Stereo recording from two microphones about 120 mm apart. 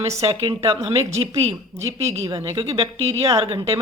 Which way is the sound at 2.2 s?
30° right (ahead or behind).